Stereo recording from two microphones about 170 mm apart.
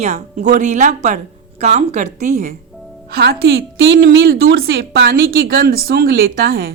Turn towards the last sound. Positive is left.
turn(degrees=-65)  # may be behind; listen again after turning